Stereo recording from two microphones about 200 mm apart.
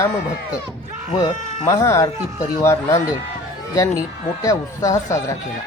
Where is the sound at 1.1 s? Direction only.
25° left (ahead or behind).